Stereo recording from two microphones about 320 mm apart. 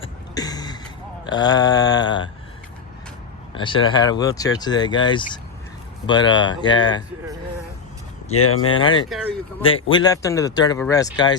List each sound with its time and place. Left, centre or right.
0.0 s a sound: centre
1.2 s speech: centre
3.5 s speech: centre
8.3 s speech: left
8.8 s speech: centre